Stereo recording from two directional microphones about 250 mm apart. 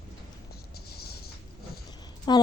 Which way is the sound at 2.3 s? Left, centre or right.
Centre.